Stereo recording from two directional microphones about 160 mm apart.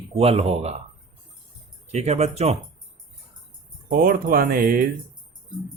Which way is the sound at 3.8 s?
60° right (ahead or behind).